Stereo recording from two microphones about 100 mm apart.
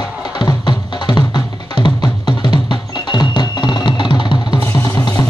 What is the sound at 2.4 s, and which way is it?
Music, 45° left (ahead or behind).